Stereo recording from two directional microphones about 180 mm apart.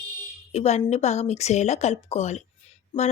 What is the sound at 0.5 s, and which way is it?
A woman's voice, 35° left (ahead or behind).